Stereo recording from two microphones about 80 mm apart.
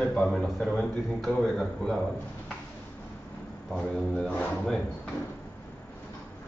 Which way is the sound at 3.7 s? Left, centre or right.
Centre.